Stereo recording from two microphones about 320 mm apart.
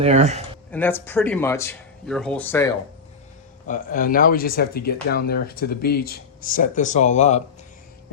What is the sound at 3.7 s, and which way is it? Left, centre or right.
Speech, left.